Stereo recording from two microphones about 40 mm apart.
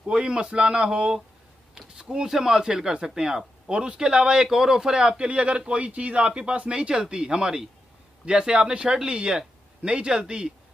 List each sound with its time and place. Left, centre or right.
0.0 s speech: right
2.0 s a man's voice: centre
4.9 s speech: right